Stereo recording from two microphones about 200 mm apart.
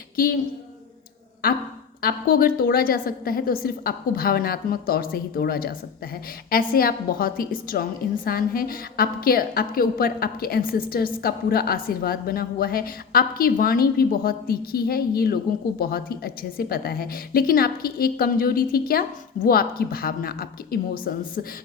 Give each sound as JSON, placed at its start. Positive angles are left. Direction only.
{"t": 2.0, "sound": "a woman's voice", "side_deg": 45}